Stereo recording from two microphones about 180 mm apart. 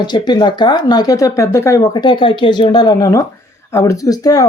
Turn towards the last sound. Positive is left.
turn(degrees=20)  # may be behind; listen again after turning